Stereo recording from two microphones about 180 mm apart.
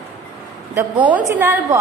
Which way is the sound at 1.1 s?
10° right (ahead or behind).